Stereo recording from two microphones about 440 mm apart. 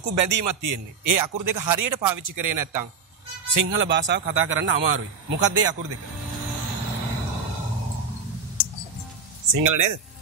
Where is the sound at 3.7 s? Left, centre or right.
Right.